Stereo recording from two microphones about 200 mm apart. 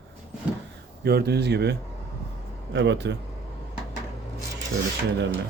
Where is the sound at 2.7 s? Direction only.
60° right (ahead or behind).